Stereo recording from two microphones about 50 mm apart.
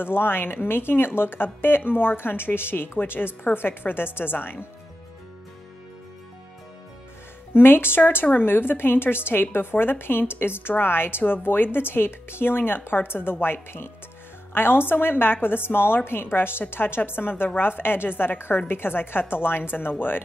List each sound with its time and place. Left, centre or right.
0.0 s speech: left
7.5 s speech: left